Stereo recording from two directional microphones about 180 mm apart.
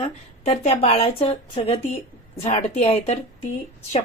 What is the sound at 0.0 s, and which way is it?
A woman's voice, 35° left (ahead or behind).